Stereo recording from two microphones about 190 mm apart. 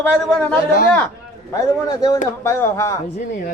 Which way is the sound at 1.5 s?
15° left (ahead or behind).